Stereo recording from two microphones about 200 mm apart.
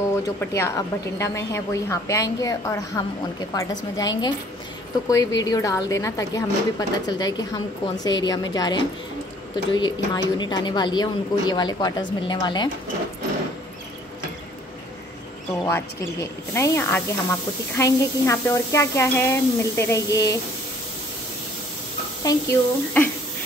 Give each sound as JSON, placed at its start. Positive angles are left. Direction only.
{"t": 0.1, "sound": "a woman's voice", "side_deg": 15}
{"t": 15.6, "sound": "a woman's voice", "side_deg": 15}
{"t": 22.2, "sound": "a woman's voice", "side_deg": 15}